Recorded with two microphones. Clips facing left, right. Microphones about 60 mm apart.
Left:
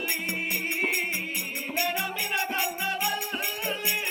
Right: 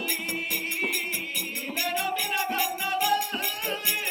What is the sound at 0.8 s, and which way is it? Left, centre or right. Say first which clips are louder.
Music: left 2 dB; left.